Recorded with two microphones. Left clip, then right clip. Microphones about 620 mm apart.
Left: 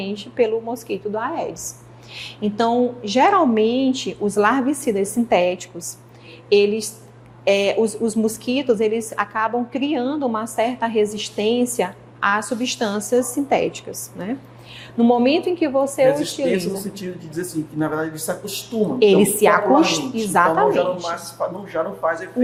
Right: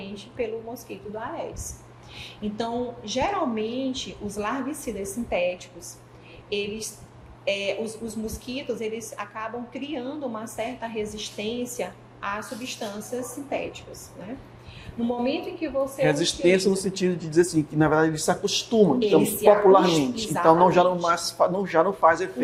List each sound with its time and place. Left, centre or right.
0.0 s a woman's voice: left
15.0 s a woman's voice: left
16.0 s speech: right
18.9 s a woman's voice: left
20.5 s a man's voice: right